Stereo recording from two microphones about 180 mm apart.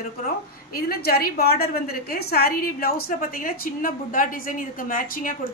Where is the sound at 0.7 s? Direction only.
60° left (ahead or behind).